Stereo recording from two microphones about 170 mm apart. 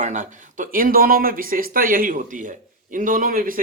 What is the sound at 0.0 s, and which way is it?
Speech, 45° right (ahead or behind).